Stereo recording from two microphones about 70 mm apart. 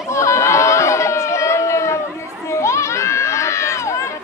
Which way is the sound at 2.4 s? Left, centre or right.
Left.